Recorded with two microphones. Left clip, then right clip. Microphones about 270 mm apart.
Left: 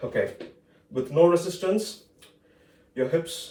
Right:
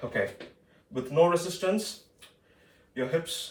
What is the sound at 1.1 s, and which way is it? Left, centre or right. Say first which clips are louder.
Speech: left 3 dB; centre.